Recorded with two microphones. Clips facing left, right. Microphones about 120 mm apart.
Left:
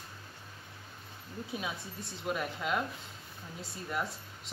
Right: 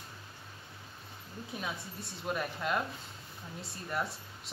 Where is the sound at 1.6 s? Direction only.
5° left (ahead or behind).